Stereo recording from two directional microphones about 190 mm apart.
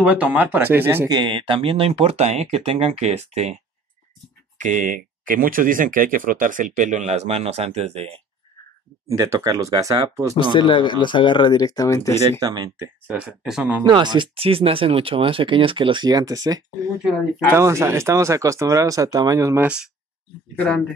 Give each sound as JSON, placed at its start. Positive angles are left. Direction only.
{"t": 0.0, "sound": "speech", "side_deg": -5}
{"t": 4.6, "sound": "speech", "side_deg": -40}
{"t": 9.0, "sound": "speech", "side_deg": -15}
{"t": 10.5, "sound": "speech", "side_deg": 25}
{"t": 12.4, "sound": "speech", "side_deg": -20}
{"t": 13.4, "sound": "speech", "side_deg": -5}
{"t": 13.8, "sound": "speech", "side_deg": -25}
{"t": 20.5, "sound": "speech", "side_deg": 5}